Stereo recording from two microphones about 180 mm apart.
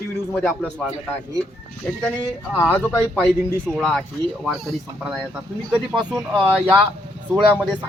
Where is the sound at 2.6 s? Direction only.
10° left (ahead or behind).